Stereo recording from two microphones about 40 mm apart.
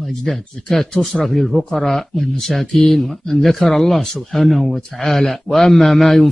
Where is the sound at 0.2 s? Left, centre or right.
Centre.